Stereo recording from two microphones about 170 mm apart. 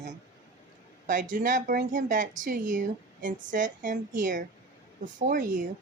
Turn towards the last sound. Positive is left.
turn(degrees=-50)  # may be behind; listen again after turning